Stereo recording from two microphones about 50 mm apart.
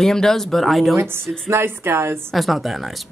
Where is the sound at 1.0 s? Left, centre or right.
Right.